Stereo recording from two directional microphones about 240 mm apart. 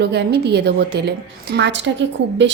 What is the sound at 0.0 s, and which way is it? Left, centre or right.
A woman's voice, right.